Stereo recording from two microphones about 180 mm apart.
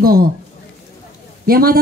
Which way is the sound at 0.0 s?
55° right (ahead or behind).